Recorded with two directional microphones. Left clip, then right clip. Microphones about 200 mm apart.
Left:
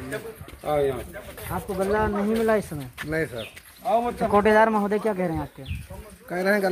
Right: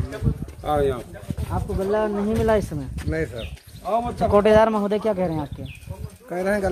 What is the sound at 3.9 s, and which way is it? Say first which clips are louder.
Speech: right 3 dB; 50° right (ahead or behind).